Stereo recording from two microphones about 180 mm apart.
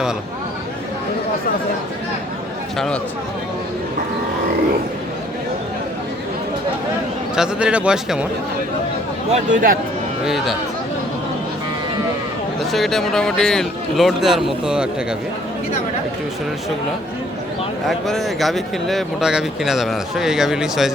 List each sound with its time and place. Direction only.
2.7 s speech: centre (ahead or behind)
7.3 s speech: 5° right (ahead or behind)
9.3 s a man's voice: 45° right (ahead or behind)
10.2 s speech: centre (ahead or behind)
12.5 s speech: centre (ahead or behind)
17.8 s speech: centre (ahead or behind)